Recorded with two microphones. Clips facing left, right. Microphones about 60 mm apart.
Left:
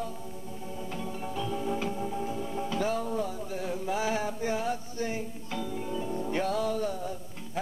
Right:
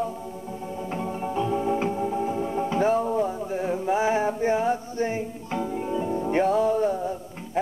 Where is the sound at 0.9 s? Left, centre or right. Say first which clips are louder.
Right 8 dB; right.